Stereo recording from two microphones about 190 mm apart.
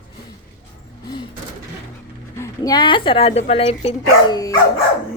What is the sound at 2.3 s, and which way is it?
Speech, 15° left (ahead or behind).